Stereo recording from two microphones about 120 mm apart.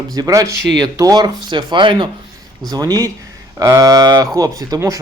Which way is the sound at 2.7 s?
30° right (ahead or behind).